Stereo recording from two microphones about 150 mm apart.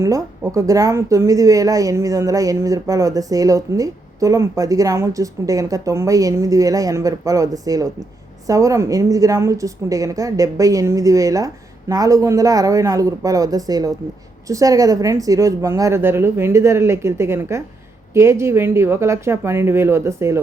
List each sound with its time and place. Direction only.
0.0 s speech: 20° right (ahead or behind)